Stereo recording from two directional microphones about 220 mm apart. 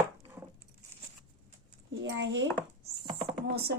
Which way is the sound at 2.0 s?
55° right (ahead or behind).